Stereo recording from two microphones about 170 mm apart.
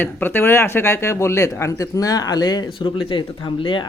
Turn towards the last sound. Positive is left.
turn(degrees=30)  # may be behind; listen again after turning